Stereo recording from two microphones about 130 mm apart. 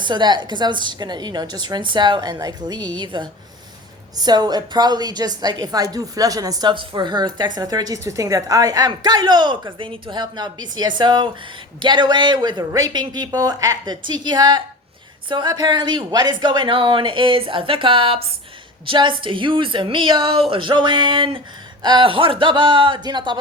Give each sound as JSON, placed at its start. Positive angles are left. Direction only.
{"t": 0.0, "sound": "a woman's voice", "side_deg": -35}